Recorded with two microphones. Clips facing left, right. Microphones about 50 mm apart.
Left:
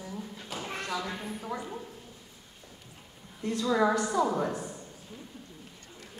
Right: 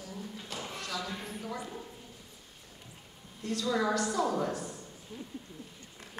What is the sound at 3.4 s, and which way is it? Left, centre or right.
A woman's voice, left.